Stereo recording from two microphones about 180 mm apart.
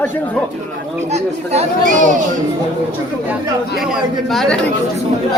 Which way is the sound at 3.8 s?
Centre (ahead or behind).